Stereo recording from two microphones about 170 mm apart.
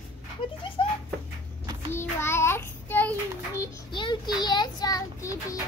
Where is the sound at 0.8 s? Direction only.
30° left (ahead or behind).